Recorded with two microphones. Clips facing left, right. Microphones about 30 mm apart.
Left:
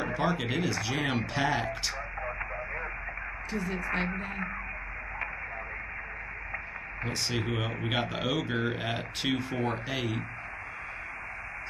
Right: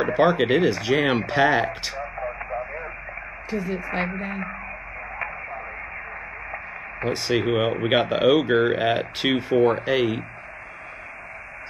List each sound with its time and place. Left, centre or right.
0.0 s speech: right
3.4 s speech: centre
7.0 s speech: right